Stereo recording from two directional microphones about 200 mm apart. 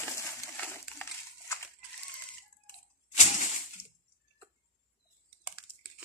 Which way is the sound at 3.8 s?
55° left (ahead or behind).